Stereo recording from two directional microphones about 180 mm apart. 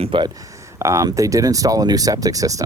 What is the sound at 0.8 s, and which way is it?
Speech, 15° right (ahead or behind).